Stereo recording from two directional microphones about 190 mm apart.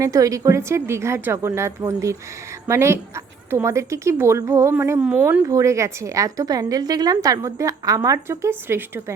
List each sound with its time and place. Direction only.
0.0 s speech: 15° right (ahead or behind)